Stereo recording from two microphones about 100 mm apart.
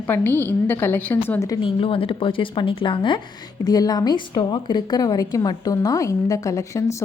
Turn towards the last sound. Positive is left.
turn(degrees=30)  # may be behind; listen again after turning